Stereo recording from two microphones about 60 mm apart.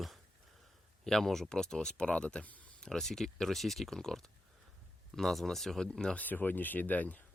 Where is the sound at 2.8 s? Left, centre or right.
Centre.